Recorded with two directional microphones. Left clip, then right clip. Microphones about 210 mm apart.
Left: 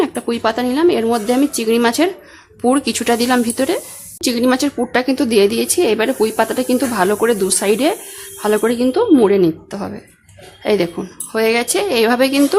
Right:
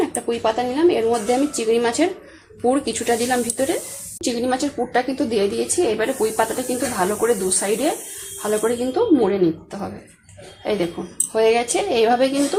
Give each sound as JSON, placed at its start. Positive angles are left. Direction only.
{"t": 0.0, "sound": "a woman's voice", "side_deg": 40}